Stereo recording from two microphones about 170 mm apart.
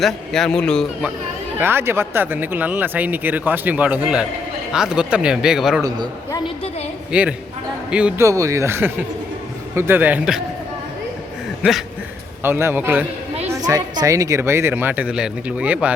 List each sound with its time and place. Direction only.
0.0 s speech: 5° left (ahead or behind)
1.5 s speech: 15° right (ahead or behind)
7.1 s speech: 10° right (ahead or behind)
8.2 s speech: 20° right (ahead or behind)
12.4 s speech: 15° right (ahead or behind)
13.5 s speech: 20° right (ahead or behind)